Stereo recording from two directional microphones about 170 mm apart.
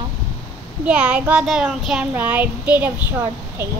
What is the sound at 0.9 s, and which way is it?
Child singing, 5° right (ahead or behind).